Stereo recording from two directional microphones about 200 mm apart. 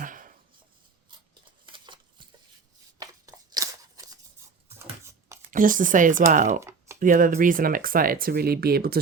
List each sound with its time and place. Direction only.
0.0 s a sound: 40° right (ahead or behind)
1.6 s a sound: 25° right (ahead or behind)
3.0 s scissors: 20° right (ahead or behind)
5.5 s speech: 40° right (ahead or behind)
6.6 s typing: 15° right (ahead or behind)
7.0 s speech: 40° right (ahead or behind)